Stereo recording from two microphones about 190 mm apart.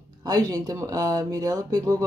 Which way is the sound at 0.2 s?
20° right (ahead or behind).